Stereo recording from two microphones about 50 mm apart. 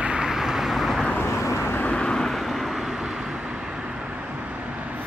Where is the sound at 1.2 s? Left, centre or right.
Left.